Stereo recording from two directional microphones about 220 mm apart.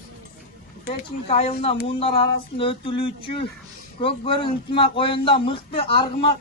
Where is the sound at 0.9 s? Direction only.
25° left (ahead or behind).